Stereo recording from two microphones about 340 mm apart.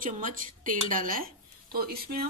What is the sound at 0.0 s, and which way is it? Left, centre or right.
A woman's voice, right.